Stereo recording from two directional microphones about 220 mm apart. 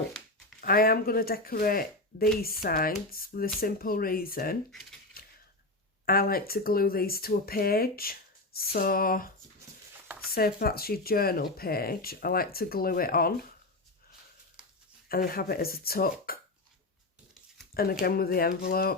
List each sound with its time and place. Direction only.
0.6 s speech: 45° left (ahead or behind)
5.2 s typewriter: 45° left (ahead or behind)
6.1 s speech: 40° left (ahead or behind)
10.3 s speech: 45° left (ahead or behind)
15.1 s speech: 40° left (ahead or behind)
18.0 s speech: 45° left (ahead or behind)